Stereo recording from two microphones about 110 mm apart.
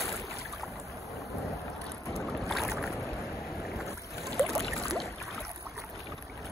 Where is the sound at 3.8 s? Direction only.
30° right (ahead or behind).